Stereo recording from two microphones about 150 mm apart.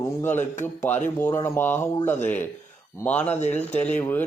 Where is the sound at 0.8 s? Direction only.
15° left (ahead or behind).